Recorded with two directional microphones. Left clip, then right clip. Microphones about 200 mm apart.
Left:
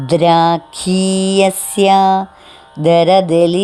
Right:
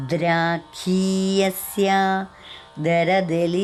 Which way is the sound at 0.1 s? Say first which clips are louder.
Left 11 dB; 25° left (ahead or behind).